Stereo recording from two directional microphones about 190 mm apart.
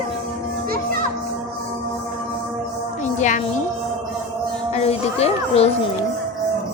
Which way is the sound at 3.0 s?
40° left (ahead or behind).